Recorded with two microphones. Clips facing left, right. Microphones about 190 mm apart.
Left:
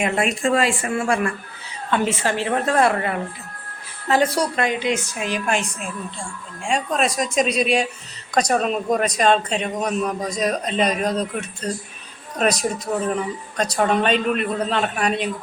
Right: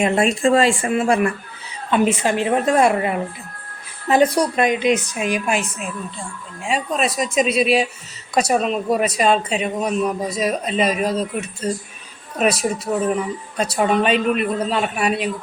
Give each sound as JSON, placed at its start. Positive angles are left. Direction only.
{"t": 0.0, "sound": "a woman's voice", "side_deg": -30}